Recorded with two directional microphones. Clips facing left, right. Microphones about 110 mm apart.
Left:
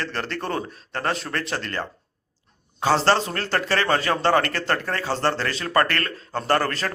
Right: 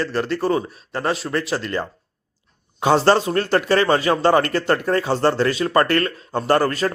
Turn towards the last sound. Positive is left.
turn(degrees=-15)  # may be behind; listen again after turning